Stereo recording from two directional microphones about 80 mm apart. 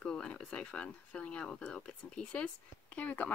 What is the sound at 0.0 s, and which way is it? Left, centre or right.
Speech, centre.